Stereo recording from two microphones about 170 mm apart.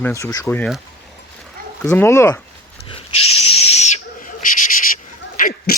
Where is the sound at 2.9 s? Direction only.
35° left (ahead or behind).